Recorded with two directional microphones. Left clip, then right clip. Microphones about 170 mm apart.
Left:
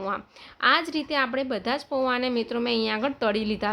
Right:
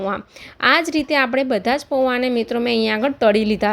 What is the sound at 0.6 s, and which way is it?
A woman's voice, 35° right (ahead or behind).